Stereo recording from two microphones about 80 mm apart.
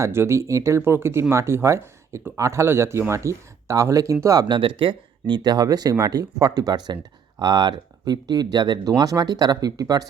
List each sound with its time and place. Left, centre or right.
0.0 s speech: right
4.4 s speech: right